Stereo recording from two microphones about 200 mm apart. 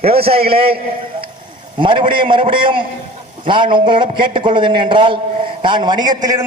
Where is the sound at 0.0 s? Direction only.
30° right (ahead or behind).